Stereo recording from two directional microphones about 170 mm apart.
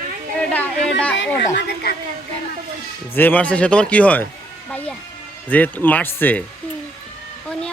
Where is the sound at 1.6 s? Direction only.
80° left.